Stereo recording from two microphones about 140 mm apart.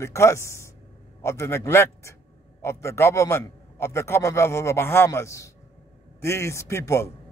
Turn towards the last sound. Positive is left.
turn(degrees=20)  # may be behind; listen again after turning